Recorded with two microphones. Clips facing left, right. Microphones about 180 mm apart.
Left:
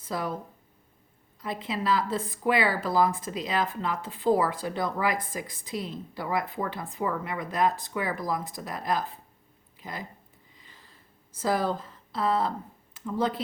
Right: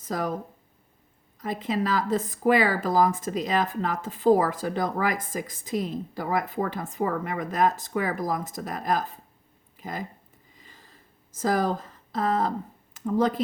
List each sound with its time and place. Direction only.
0.0 s speech: 45° right (ahead or behind)
1.4 s speech: 45° right (ahead or behind)
10.5 s a sound: 45° right (ahead or behind)